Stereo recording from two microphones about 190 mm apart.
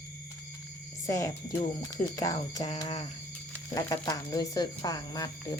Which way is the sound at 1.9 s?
20° left (ahead or behind).